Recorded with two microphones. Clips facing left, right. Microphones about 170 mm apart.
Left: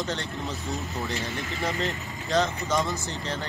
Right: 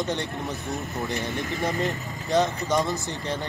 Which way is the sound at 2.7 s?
15° right (ahead or behind).